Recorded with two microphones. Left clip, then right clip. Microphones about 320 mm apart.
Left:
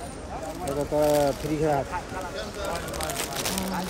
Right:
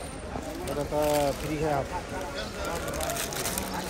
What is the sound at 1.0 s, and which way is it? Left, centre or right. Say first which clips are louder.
Speech: left 4 dB; left.